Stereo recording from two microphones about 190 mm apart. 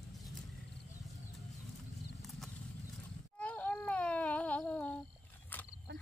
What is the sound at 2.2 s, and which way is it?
Horse, centre (ahead or behind).